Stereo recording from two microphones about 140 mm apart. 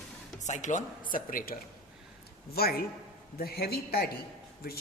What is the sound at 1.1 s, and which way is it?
Speech, 85° left.